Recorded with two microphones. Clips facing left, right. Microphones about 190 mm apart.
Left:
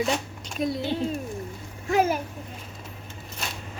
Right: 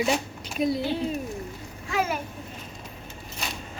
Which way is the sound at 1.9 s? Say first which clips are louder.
Left 5 dB; 40° left (ahead or behind).